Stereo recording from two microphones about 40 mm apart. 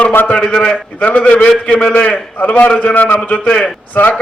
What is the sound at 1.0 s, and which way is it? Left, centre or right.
Speech, left.